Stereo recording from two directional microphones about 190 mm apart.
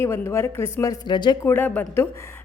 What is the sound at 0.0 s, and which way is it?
A woman's voice, 15° left (ahead or behind).